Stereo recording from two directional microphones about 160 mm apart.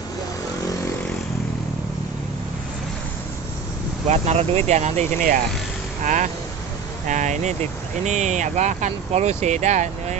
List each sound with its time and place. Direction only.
4.1 s speech: 40° right (ahead or behind)